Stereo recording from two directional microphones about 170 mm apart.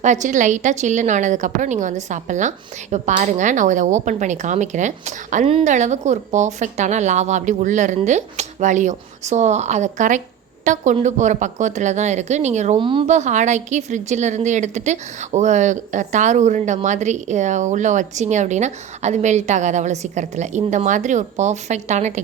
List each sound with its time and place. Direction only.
0.0 s a woman's voice: 45° right (ahead or behind)
12.8 s a woman's voice: 30° right (ahead or behind)
13.1 s a woman's voice: 45° right (ahead or behind)